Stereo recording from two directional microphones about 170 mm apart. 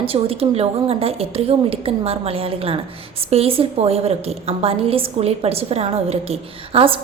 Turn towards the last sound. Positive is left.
turn(degrees=-35)  # may be behind; listen again after turning